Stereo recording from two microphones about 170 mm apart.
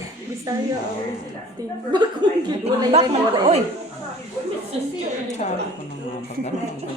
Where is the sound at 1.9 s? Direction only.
25° right (ahead or behind).